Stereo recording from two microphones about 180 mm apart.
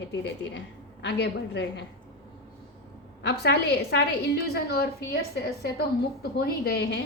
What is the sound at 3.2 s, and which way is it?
A woman's voice, 65° left (ahead or behind).